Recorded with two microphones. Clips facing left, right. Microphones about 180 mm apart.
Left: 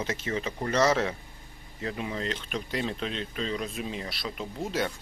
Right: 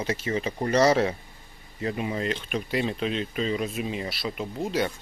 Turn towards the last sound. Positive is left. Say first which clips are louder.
# right 3 dB
turn(degrees=0)  # may be behind; listen again after turning